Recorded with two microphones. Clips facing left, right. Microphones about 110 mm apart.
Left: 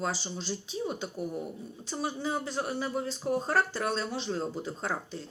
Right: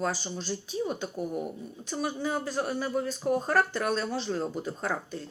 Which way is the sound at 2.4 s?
20° left (ahead or behind).